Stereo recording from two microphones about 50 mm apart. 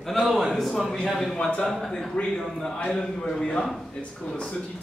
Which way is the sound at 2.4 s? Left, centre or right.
Centre.